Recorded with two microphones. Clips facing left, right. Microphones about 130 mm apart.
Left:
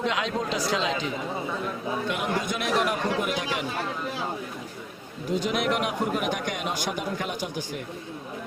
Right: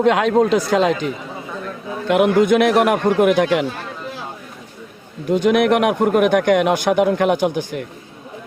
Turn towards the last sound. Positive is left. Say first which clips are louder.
# right 14 dB
turn(degrees=-70)  # may be behind; listen again after turning